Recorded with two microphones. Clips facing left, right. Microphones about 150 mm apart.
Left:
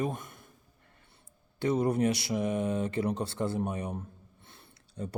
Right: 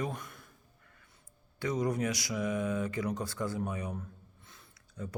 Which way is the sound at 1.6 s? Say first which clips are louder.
Left 5 dB; 30° left (ahead or behind).